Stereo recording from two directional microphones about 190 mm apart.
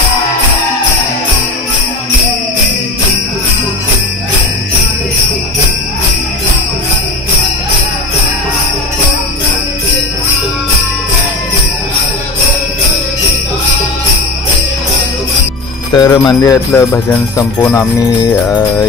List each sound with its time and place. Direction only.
15.9 s jingle bell: 20° left (ahead or behind)